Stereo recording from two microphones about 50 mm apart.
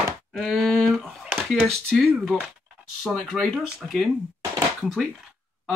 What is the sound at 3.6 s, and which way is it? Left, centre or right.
Speech, centre.